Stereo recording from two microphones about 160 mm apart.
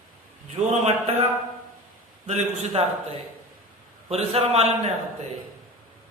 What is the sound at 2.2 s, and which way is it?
A man's voice, 35° right (ahead or behind).